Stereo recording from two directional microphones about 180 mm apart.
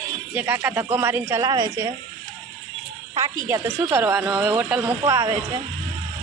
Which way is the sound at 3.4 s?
15° right (ahead or behind).